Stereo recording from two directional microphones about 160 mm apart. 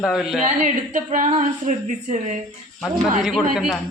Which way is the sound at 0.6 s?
50° right (ahead or behind).